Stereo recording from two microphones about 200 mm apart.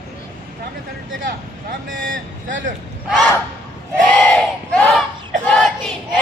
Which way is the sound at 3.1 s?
5° left (ahead or behind).